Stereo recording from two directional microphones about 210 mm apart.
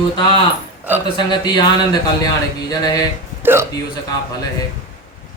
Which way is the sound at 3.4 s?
10° right (ahead or behind).